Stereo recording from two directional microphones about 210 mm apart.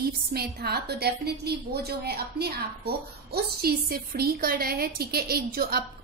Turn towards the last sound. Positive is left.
turn(degrees=-45)  # may be behind; listen again after turning